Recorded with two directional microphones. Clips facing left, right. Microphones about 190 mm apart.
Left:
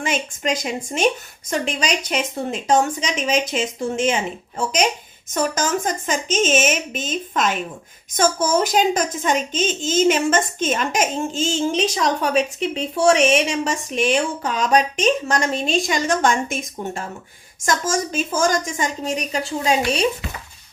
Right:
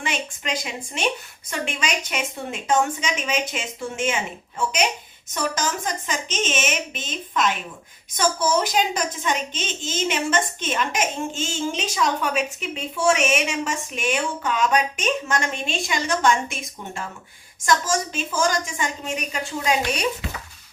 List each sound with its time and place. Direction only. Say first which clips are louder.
0.0 s a child's voice: left 5 dB; 45° left (ahead or behind)